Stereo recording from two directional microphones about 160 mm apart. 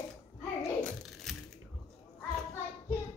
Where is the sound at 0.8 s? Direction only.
Centre (ahead or behind).